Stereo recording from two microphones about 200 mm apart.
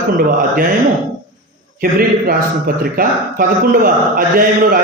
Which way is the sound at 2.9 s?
45° right (ahead or behind).